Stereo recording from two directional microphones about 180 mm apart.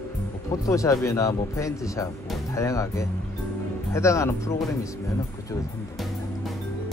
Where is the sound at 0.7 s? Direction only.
15° left (ahead or behind).